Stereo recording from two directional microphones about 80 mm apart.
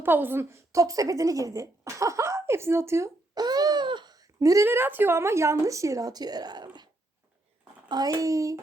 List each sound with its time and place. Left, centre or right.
0.0 s a woman's voice: right
0.7 s speech: right
3.3 s a sound: right
4.4 s speech: right
4.6 s a woman's voice: right
7.9 s a child's voice: right